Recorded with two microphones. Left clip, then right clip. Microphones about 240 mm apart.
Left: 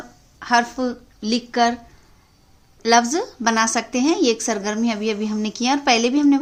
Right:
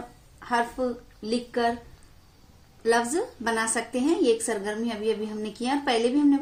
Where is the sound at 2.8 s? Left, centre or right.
Left.